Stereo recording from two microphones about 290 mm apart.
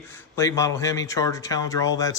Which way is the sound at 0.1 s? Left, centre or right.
Centre.